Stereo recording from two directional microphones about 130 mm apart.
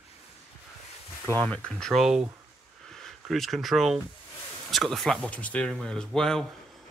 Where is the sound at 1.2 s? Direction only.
10° left (ahead or behind).